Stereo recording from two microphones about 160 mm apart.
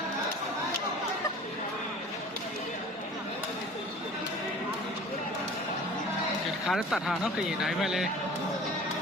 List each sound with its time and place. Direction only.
6.7 s speech: 5° right (ahead or behind)